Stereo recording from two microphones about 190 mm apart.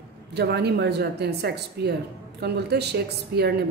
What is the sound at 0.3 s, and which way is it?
A woman's voice, 60° right (ahead or behind).